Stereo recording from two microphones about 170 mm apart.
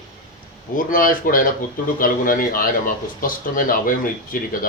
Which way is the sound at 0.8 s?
55° left (ahead or behind).